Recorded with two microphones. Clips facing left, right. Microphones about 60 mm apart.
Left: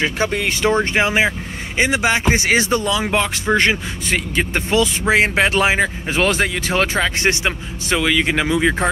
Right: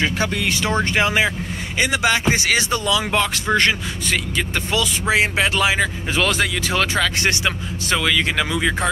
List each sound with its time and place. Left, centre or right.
0.0 s speech: left
3.1 s speech: centre
4.4 s speech: left